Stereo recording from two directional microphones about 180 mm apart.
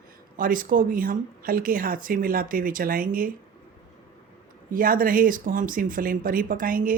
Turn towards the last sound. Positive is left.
turn(degrees=-50)  # may be behind; listen again after turning